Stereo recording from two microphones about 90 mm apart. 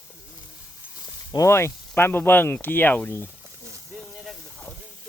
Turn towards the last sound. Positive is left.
turn(degrees=-5)  # may be behind; listen again after turning